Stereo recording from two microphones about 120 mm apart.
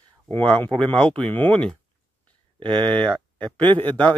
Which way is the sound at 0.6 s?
40° right (ahead or behind).